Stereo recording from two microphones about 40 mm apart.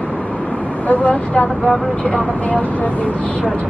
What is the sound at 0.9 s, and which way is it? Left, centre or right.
Speech, left.